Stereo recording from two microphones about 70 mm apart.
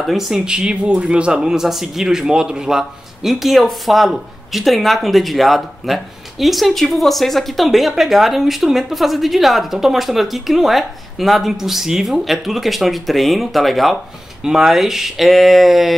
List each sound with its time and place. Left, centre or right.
0.0 s speech: centre